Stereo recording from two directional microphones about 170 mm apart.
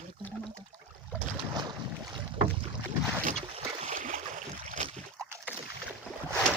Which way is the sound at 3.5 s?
45° right (ahead or behind).